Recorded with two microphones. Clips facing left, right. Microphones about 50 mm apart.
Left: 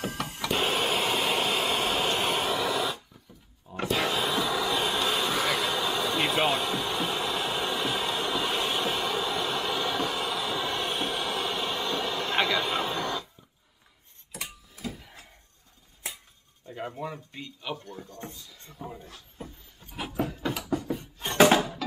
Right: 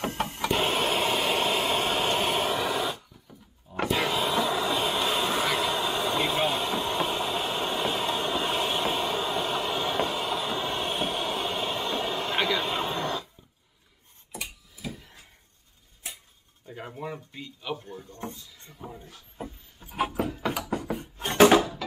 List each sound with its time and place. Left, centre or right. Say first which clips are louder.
0.5 s a sound: right 1 dB; centre
4.5 s vehicle: right 1 dB; centre
4.7 s vehicle: right 1 dB; centre
6.2 s vehicle: left 1 dB; centre
9.3 s train: right 1 dB; centre
16.6 s a sound: left 3 dB; centre
17.3 s speech: right 1 dB; centre
18.2 s speech: right 4 dB; centre
19.4 s a sound: right 5 dB; centre